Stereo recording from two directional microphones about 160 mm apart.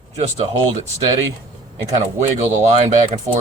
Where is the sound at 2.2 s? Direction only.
45° right (ahead or behind).